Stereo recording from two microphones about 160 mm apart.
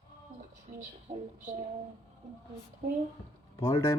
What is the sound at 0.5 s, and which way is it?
A man's voice, 50° right (ahead or behind).